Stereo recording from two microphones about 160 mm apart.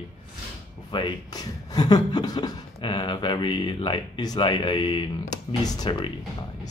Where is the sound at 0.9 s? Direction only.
25° left (ahead or behind).